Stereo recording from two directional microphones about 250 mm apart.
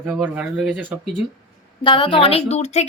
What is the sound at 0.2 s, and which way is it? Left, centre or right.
Speech, centre.